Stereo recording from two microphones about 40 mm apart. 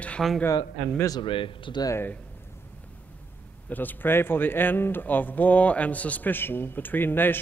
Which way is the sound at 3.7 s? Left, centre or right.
Left.